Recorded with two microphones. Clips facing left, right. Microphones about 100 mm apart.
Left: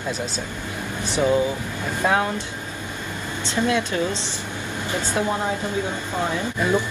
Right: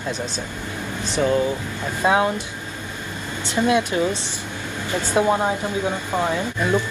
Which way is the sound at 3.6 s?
20° right (ahead or behind).